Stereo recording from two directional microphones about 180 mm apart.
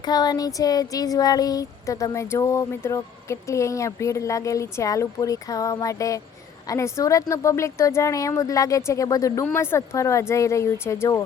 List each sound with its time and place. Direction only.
0.0 s speech: 20° left (ahead or behind)